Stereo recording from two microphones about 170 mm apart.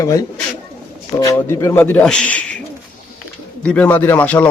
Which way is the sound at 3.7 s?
10° left (ahead or behind).